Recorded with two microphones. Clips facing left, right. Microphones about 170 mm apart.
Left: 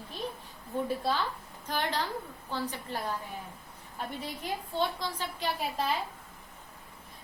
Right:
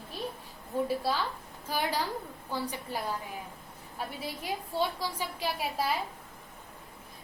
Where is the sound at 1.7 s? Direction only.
10° right (ahead or behind).